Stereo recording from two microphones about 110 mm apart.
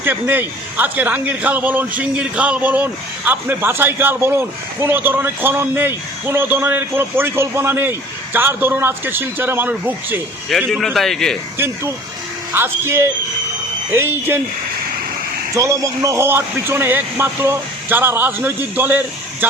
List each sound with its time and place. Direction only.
0.0 s a man's voice: 20° right (ahead or behind)
10.7 s a man's voice: 5° left (ahead or behind)
11.5 s a man's voice: 25° right (ahead or behind)
15.5 s a man's voice: 30° right (ahead or behind)